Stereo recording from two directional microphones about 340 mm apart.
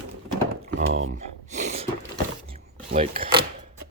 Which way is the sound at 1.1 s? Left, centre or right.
Centre.